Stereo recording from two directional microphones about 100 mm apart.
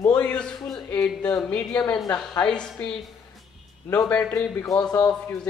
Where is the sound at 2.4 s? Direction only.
10° left (ahead or behind).